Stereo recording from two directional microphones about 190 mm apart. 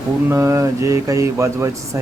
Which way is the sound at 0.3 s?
15° right (ahead or behind).